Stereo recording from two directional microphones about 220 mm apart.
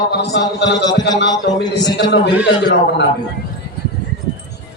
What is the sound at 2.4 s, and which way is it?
Speech, 50° left (ahead or behind).